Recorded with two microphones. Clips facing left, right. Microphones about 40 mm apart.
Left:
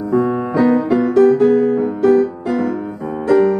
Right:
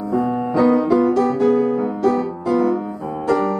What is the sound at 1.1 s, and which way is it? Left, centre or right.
Music, left.